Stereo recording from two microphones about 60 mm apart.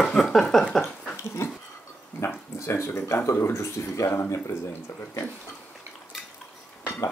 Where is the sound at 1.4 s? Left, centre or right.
Left.